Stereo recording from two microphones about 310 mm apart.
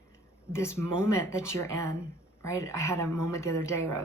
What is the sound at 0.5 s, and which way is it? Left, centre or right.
Speech, centre.